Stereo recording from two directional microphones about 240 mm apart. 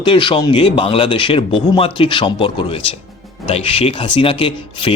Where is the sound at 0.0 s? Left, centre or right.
Centre.